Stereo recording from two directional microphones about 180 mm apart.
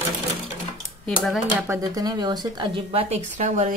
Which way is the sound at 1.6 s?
15° right (ahead or behind).